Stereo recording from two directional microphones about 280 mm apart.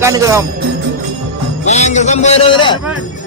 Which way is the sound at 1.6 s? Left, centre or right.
Left.